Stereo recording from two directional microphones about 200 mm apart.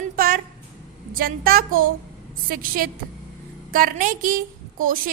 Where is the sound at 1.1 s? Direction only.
45° right (ahead or behind).